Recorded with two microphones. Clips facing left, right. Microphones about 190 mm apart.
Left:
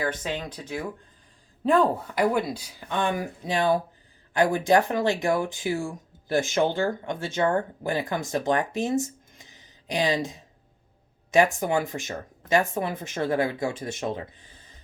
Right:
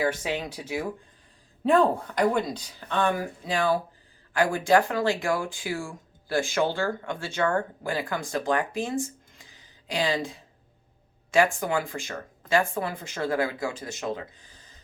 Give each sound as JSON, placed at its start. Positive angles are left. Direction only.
{"t": 0.0, "sound": "speech", "side_deg": -10}